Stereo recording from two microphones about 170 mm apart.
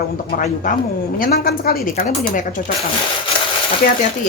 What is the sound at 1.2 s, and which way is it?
A woman's voice, 60° left (ahead or behind).